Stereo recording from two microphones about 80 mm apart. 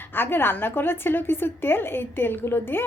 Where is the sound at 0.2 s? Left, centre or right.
Left.